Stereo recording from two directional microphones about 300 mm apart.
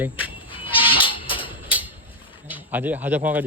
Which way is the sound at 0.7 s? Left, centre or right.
Centre.